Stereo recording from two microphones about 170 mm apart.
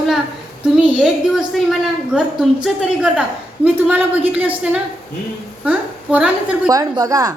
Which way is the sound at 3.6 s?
10° right (ahead or behind).